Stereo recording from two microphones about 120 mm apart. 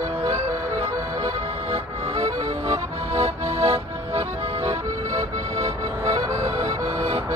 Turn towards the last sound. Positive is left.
turn(degrees=-50)  # may be behind; listen again after turning